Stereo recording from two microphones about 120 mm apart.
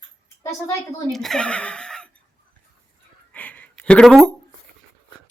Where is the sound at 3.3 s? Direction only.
10° left (ahead or behind).